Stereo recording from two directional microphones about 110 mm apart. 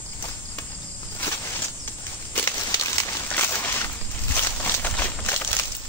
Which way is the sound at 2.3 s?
25° left (ahead or behind).